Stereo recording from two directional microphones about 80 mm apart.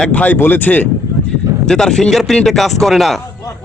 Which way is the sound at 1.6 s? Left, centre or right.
Centre.